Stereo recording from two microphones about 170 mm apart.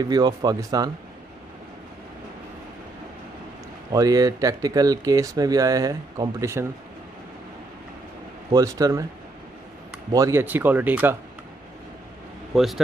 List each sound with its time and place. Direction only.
0.0 s speech: 25° right (ahead or behind)
3.9 s speech: 20° right (ahead or behind)
8.5 s speech: 20° right (ahead or behind)
10.1 s speech: 15° right (ahead or behind)
12.5 s a man's voice: centre (ahead or behind)